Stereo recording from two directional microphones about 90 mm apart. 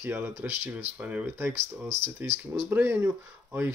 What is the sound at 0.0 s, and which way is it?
Speech, 20° right (ahead or behind).